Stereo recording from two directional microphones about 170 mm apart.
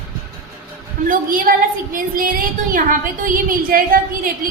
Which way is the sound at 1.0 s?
55° right (ahead or behind).